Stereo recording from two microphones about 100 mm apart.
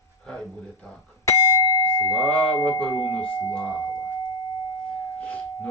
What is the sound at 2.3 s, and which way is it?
Speech, 10° left (ahead or behind).